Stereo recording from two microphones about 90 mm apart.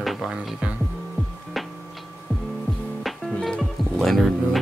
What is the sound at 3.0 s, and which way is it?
Music, 5° left (ahead or behind).